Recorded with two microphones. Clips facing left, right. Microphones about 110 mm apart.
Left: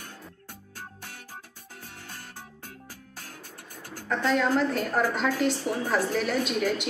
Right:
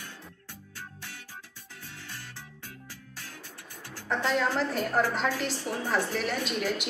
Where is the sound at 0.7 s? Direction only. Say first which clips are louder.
Left 1 dB; 45° left (ahead or behind).